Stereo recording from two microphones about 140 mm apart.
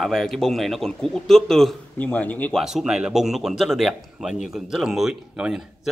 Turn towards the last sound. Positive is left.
turn(degrees=-5)  # may be behind; listen again after turning